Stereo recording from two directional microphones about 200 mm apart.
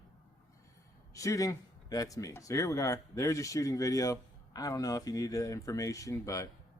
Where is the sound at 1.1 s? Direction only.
15° left (ahead or behind).